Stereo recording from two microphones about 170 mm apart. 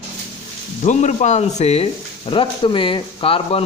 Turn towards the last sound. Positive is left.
turn(degrees=35)  # may be behind; listen again after turning